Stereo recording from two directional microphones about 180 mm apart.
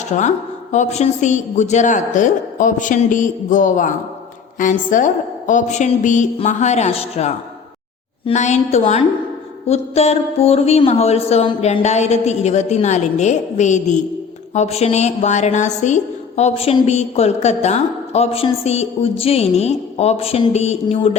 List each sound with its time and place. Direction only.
0.1 s a woman's voice: 40° left (ahead or behind)
4.6 s music: 45° left (ahead or behind)